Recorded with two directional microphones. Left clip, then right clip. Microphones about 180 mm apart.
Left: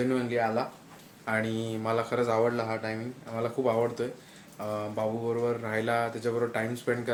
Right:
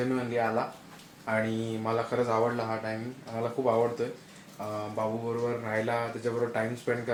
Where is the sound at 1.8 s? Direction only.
15° left (ahead or behind).